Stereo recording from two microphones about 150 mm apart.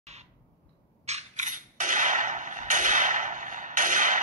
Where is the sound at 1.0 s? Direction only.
50° right (ahead or behind).